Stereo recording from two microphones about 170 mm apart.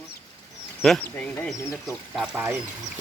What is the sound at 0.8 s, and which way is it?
Speech, centre (ahead or behind).